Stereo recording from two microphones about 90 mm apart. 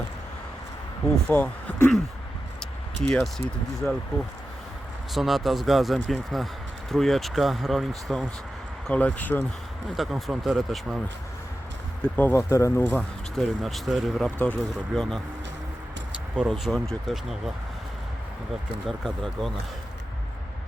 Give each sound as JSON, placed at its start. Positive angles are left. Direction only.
{"t": 1.3, "sound": "speech", "side_deg": 15}
{"t": 2.6, "sound": "speech", "side_deg": 5}
{"t": 5.1, "sound": "speech", "side_deg": 0}
{"t": 8.9, "sound": "speech", "side_deg": 15}
{"t": 9.9, "sound": "speech", "side_deg": 0}
{"t": 12.0, "sound": "speech", "side_deg": 15}
{"t": 12.3, "sound": "speech", "side_deg": 30}
{"t": 13.0, "sound": "speech", "side_deg": 5}
{"t": 14.3, "sound": "speech", "side_deg": 15}
{"t": 14.7, "sound": "speech", "side_deg": 5}
{"t": 16.4, "sound": "speech", "side_deg": -5}
{"t": 18.9, "sound": "speech", "side_deg": 0}